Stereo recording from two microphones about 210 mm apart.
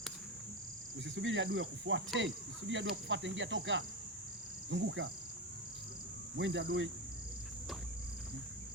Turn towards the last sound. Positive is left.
turn(degrees=-55)  # may be behind; listen again after turning